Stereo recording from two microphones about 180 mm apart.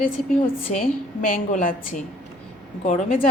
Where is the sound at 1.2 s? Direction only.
50° left (ahead or behind).